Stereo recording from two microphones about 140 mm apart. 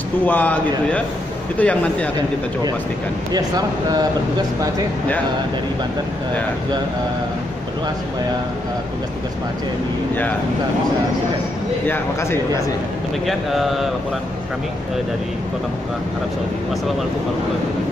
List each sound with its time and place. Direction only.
0.3 s speech: 10° left (ahead or behind)
3.3 s speech: 30° right (ahead or behind)
11.9 s speech: 20° left (ahead or behind)
13.3 s speech: centre (ahead or behind)